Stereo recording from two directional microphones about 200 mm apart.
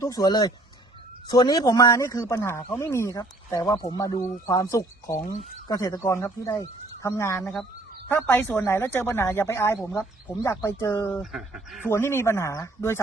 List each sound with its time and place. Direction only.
0.0 s speech: 20° left (ahead or behind)
11.2 s speech: centre (ahead or behind)
11.9 s speech: 15° left (ahead or behind)